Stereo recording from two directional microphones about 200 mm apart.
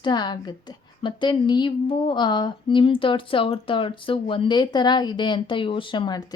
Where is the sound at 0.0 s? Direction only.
20° left (ahead or behind).